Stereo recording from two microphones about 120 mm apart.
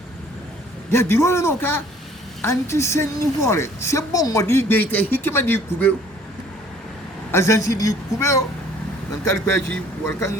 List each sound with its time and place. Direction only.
0.9 s a woman's voice: 20° left (ahead or behind)
7.3 s a woman's voice: 25° left (ahead or behind)